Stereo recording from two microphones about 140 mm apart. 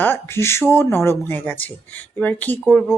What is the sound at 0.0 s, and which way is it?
Speech, 15° left (ahead or behind).